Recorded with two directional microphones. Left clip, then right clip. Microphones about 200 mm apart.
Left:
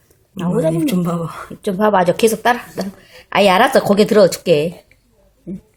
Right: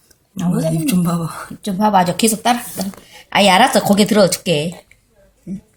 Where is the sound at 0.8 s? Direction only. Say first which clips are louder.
Left 1 dB; centre (ahead or behind).